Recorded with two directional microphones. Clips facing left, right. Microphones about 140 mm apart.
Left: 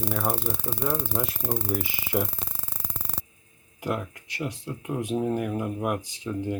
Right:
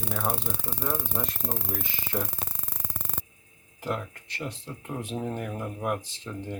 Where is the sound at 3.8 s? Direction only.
5° left (ahead or behind).